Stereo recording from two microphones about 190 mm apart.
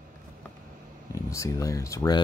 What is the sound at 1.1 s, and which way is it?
Speech, 15° left (ahead or behind).